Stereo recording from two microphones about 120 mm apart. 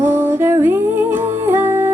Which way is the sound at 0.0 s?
20° right (ahead or behind).